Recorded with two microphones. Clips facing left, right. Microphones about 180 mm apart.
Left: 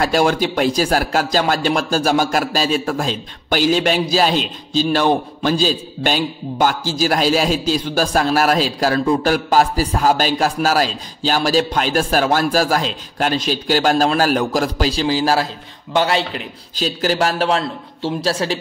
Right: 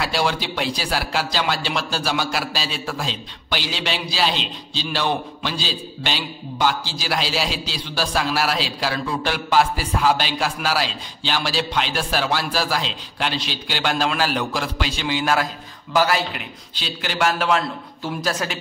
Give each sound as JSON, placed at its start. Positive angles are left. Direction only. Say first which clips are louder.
{"t": 0.0, "sound": "a man's voice", "louder": "left 7 dB", "side_deg": 45}
{"t": 16.7, "sound": "a man's voice", "louder": "left 9 dB", "side_deg": 40}